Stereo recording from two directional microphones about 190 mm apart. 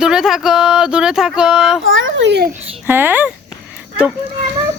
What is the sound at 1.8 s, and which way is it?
Speech, 90° right.